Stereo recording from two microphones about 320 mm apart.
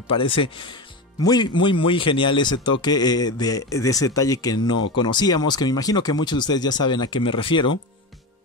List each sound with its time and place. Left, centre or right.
0.1 s speech: centre